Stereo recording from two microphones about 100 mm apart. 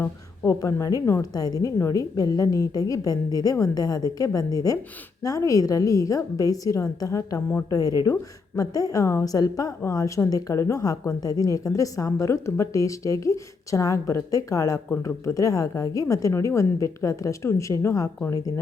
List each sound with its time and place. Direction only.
0.0 s a woman's voice: 25° left (ahead or behind)